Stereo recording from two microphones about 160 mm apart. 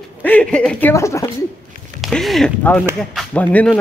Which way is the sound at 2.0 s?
Centre (ahead or behind).